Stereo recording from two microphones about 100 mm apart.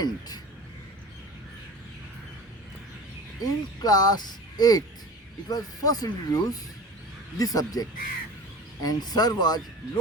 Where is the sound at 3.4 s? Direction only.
40° left (ahead or behind).